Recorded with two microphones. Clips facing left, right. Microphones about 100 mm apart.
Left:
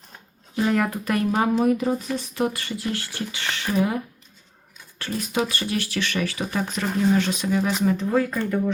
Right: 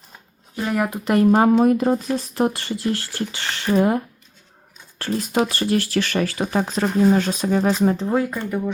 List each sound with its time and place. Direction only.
0.5 s speech: 5° right (ahead or behind)
1.0 s speech: 30° right (ahead or behind)
8.1 s speech: 20° right (ahead or behind)